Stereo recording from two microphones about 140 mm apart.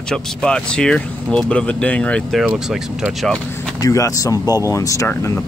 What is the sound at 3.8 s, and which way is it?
Speech, 25° left (ahead or behind).